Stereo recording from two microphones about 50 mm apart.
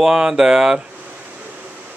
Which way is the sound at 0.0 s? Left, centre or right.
Centre.